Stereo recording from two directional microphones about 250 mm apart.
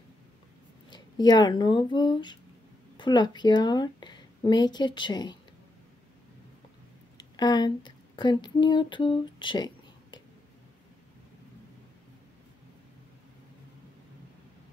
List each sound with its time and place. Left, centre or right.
0.8 s speech: centre
7.2 s speech: centre